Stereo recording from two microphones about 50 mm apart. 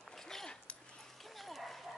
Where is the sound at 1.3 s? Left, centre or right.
Centre.